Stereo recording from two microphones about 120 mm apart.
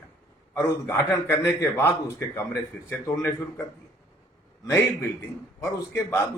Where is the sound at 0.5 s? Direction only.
20° left (ahead or behind).